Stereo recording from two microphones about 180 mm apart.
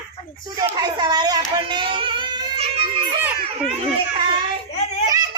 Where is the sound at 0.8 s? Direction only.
25° right (ahead or behind).